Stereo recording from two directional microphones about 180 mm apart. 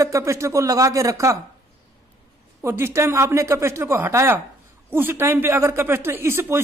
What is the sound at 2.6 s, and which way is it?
Speech, 15° right (ahead or behind).